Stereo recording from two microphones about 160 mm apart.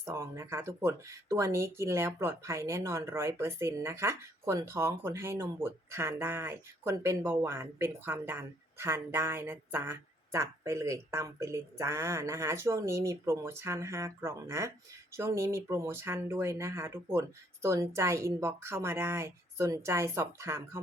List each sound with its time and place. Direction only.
0.0 s speech: 20° right (ahead or behind)